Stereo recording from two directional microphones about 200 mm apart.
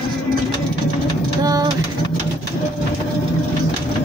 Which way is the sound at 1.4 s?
20° right (ahead or behind).